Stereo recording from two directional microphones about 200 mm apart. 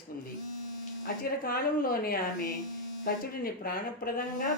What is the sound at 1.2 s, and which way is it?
Speech, 45° left (ahead or behind).